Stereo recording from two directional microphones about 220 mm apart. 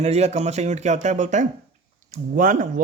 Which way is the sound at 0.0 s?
30° right (ahead or behind).